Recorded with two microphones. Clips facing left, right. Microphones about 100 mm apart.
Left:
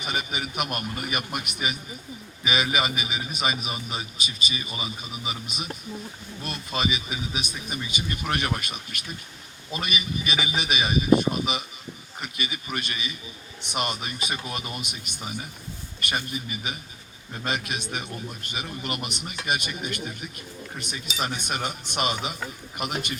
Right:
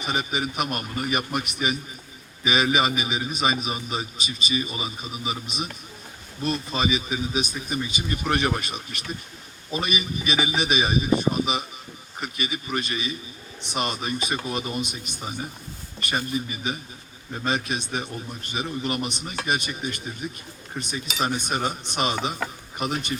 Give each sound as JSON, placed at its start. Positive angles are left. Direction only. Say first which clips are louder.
{"t": 0.0, "sound": "a man's voice", "louder": "right 4 dB", "side_deg": -35}